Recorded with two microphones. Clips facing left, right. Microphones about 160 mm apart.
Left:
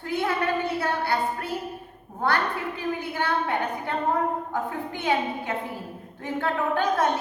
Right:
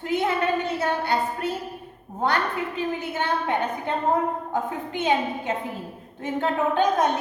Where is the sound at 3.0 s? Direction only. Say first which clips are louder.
Even; 20° right (ahead or behind).